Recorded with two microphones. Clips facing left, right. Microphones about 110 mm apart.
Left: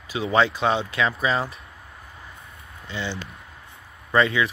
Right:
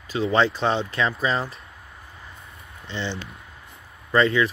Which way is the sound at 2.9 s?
10° left (ahead or behind).